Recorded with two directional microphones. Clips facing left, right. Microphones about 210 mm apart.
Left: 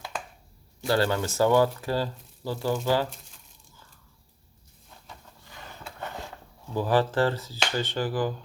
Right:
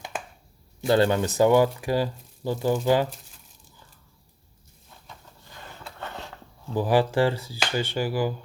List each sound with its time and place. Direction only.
0.9 s speech: 20° right (ahead or behind)
6.7 s speech: 15° right (ahead or behind)